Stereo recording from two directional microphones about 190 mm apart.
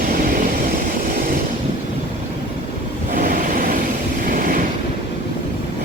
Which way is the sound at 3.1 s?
45° right (ahead or behind).